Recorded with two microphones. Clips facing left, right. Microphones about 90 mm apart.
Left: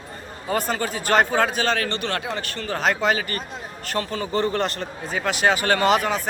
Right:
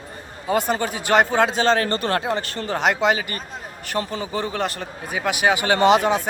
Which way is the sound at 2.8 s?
20° right (ahead or behind).